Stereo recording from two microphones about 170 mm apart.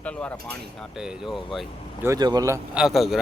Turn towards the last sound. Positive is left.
turn(degrees=0)  # may be behind; listen again after turning